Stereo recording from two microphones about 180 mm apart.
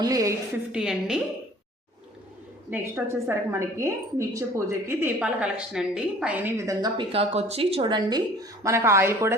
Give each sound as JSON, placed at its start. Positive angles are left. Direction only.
{"t": 0.0, "sound": "a woman's voice", "side_deg": -20}
{"t": 0.7, "sound": "a woman's voice", "side_deg": -5}
{"t": 2.6, "sound": "a woman's voice", "side_deg": -10}